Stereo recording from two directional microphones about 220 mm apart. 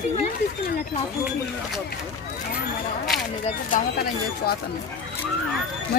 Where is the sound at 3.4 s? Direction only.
40° left (ahead or behind).